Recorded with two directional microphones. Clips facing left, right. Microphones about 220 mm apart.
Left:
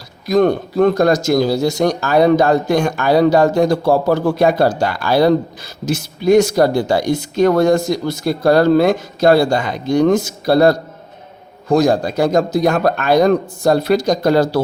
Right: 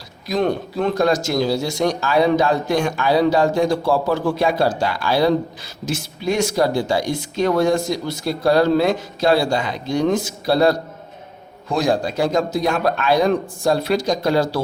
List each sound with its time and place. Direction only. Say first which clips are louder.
0.3 s a man's voice: left 6 dB; 45° left (ahead or behind)